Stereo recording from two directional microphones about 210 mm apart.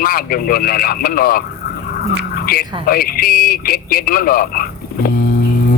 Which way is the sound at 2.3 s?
45° left (ahead or behind).